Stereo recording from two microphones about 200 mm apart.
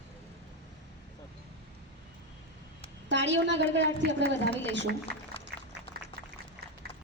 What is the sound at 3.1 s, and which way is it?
A woman's voice, 65° right (ahead or behind).